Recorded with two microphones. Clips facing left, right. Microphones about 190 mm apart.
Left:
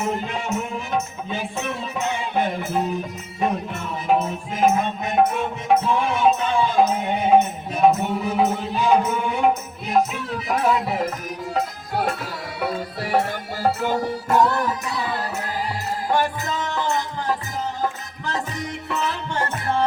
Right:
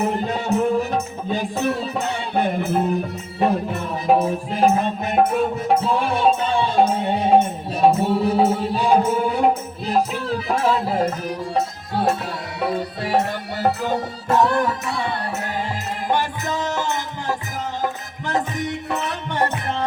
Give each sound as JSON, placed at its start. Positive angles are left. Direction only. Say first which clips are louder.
{"t": 0.0, "sound": "music", "louder": "right 3 dB", "side_deg": -35}
{"t": 2.6, "sound": "music", "louder": "right 4 dB", "side_deg": -55}
{"t": 3.4, "sound": "music", "louder": "right 4 dB", "side_deg": -35}